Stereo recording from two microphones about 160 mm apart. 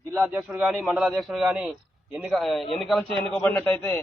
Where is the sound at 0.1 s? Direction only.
15° right (ahead or behind).